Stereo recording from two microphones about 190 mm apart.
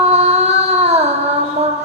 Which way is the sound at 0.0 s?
35° right (ahead or behind).